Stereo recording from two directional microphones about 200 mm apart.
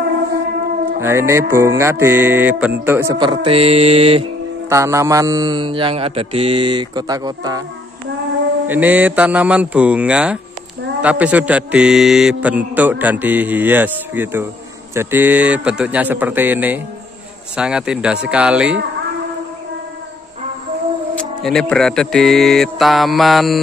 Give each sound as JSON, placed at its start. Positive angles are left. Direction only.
{"t": 1.0, "sound": "a man's voice", "side_deg": -15}
{"t": 3.2, "sound": "a man's voice", "side_deg": -25}
{"t": 4.6, "sound": "a man's voice", "side_deg": -15}
{"t": 8.6, "sound": "a man's voice", "side_deg": -10}
{"t": 21.1, "sound": "speech", "side_deg": 5}